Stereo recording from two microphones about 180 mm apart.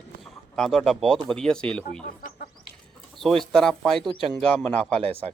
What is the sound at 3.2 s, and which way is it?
Speech, centre (ahead or behind).